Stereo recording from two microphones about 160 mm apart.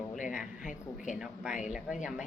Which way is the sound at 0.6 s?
55° left (ahead or behind).